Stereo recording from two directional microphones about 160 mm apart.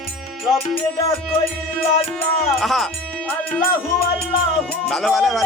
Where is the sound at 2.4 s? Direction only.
Centre (ahead or behind).